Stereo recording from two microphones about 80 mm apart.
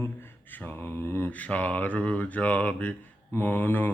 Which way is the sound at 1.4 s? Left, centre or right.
Centre.